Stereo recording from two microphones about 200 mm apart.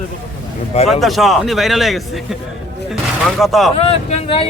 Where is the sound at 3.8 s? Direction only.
30° left (ahead or behind).